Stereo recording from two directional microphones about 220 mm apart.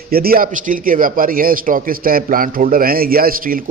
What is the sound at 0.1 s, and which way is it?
A man's voice, 45° right (ahead or behind).